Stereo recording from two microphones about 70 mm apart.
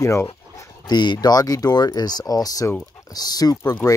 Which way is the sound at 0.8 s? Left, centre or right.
Left.